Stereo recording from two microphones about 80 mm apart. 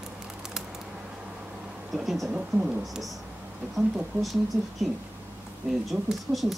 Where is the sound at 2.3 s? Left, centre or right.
Centre.